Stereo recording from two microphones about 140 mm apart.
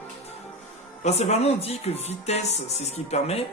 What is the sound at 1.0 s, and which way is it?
Speech, 50° left (ahead or behind).